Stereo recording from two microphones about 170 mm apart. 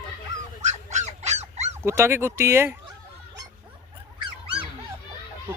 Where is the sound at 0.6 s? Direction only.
45° right (ahead or behind).